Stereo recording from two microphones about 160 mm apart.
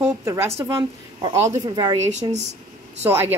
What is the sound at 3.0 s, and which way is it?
Speech, 15° right (ahead or behind).